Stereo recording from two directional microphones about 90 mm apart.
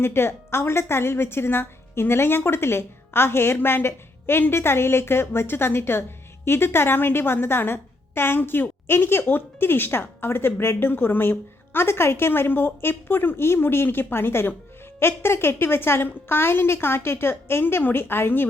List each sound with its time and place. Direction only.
0.0 s a woman's voice: 30° left (ahead or behind)